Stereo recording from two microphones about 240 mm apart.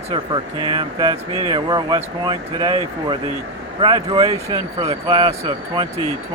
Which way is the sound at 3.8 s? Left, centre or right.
Centre.